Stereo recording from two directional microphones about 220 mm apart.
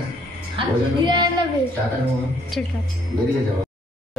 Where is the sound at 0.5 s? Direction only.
20° right (ahead or behind).